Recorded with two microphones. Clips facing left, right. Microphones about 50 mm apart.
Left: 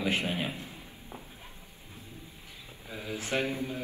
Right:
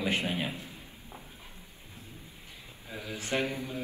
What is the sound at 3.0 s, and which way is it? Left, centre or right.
Speech, left.